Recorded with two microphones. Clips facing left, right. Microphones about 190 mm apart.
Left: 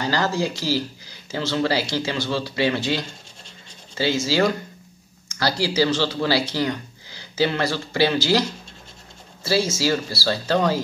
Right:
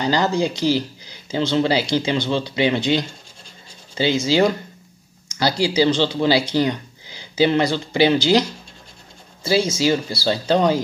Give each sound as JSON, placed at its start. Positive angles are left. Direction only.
{"t": 0.0, "sound": "speech", "side_deg": -20}
{"t": 9.7, "sound": "speech", "side_deg": -20}